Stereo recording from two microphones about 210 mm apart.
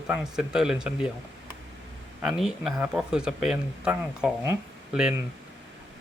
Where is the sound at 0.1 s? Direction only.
5° right (ahead or behind).